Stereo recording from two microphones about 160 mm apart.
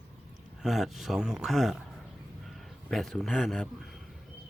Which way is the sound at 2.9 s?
Centre (ahead or behind).